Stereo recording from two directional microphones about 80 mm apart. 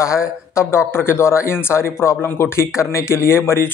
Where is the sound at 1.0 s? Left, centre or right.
Left.